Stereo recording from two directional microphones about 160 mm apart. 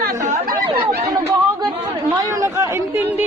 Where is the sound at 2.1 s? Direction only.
20° right (ahead or behind).